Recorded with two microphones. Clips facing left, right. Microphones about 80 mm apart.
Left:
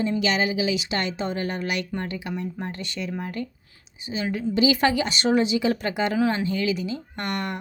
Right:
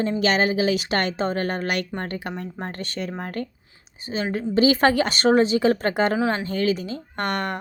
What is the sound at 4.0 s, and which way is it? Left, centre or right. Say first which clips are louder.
Speech: right 1 dB; right.